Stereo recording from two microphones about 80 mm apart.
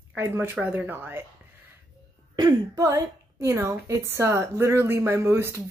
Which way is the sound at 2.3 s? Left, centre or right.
Right.